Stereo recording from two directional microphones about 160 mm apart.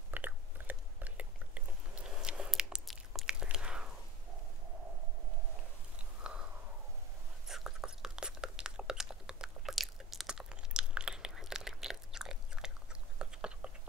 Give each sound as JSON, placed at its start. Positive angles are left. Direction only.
{"t": 0.1, "sound": "chewing", "side_deg": -10}
{"t": 7.4, "sound": "chewing", "side_deg": -5}